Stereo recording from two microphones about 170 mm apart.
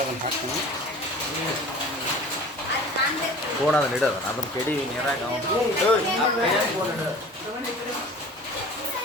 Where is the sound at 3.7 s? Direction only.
5° left (ahead or behind).